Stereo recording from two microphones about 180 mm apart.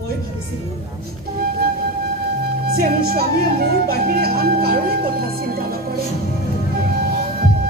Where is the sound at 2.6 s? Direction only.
60° right (ahead or behind).